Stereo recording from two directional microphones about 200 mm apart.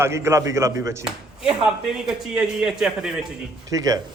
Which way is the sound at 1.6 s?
5° right (ahead or behind).